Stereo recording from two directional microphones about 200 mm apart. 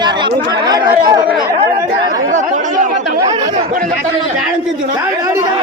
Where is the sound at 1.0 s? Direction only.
20° right (ahead or behind).